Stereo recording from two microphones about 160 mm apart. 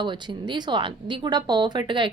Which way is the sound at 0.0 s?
30° right (ahead or behind).